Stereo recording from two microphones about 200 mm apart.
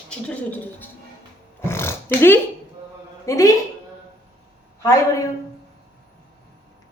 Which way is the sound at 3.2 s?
15° left (ahead or behind).